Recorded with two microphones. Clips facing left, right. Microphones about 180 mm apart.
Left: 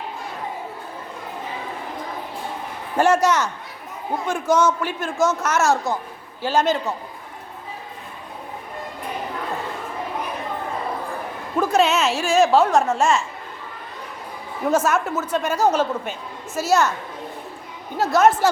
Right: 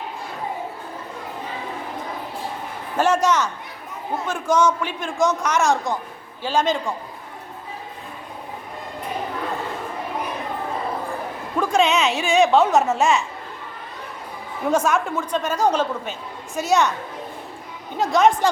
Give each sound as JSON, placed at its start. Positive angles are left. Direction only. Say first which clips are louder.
{"t": 3.0, "sound": "a woman's voice", "louder": "left 1 dB", "side_deg": 10}
{"t": 11.5, "sound": "a woman's voice", "louder": "left 1 dB", "side_deg": 5}
{"t": 14.7, "sound": "a woman's voice", "louder": "even", "side_deg": 5}
{"t": 17.9, "sound": "a woman's voice", "louder": "left 1 dB", "side_deg": 5}